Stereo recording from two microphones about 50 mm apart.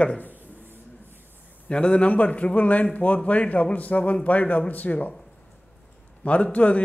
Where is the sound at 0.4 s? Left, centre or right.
Right.